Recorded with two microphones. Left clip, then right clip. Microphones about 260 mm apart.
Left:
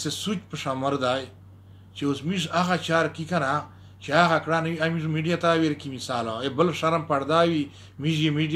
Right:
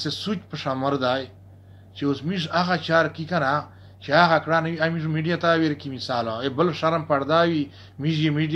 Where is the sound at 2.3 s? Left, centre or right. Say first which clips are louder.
Right 1 dB; centre.